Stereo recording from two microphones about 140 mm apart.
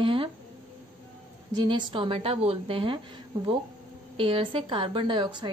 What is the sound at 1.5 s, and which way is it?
A woman's voice, 35° right (ahead or behind).